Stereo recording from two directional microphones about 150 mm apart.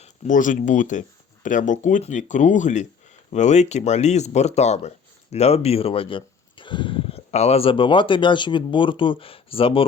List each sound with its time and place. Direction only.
0.0 s speech: 60° left (ahead or behind); by 9.8 s 35° left (ahead or behind)